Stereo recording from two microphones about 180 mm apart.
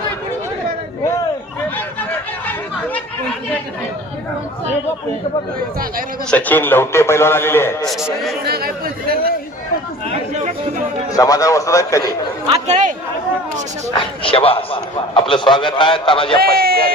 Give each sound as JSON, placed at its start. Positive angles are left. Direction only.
{"t": 6.3, "sound": "a man's voice", "side_deg": 10}
{"t": 7.9, "sound": "a man's voice", "side_deg": 0}
{"t": 8.4, "sound": "speech", "side_deg": -55}
{"t": 11.2, "sound": "a man's voice", "side_deg": 20}
{"t": 12.6, "sound": "speech", "side_deg": -40}
{"t": 13.9, "sound": "a man's voice", "side_deg": 30}
{"t": 16.4, "sound": "speech", "side_deg": -55}